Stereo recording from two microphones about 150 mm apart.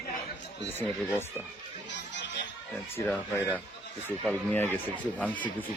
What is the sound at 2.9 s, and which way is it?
Speech, 15° left (ahead or behind).